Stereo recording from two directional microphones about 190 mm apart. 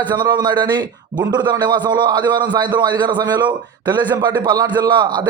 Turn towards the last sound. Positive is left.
turn(degrees=-20)  # may be behind; listen again after turning